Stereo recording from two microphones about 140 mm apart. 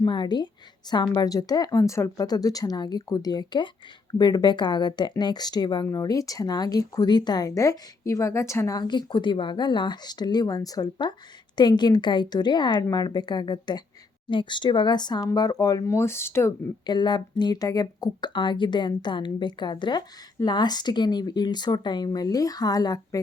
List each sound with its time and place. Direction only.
0.0 s speech: 30° left (ahead or behind)
16.8 s speech: 30° left (ahead or behind)